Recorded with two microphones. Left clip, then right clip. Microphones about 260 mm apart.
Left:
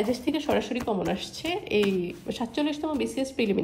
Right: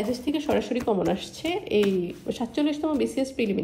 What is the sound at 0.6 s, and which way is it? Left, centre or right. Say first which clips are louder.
Speech: right 3 dB; centre.